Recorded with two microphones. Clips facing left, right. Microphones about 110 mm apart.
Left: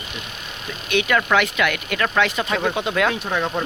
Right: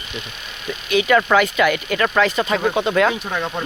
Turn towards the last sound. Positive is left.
turn(degrees=0)  # may be behind; listen again after turning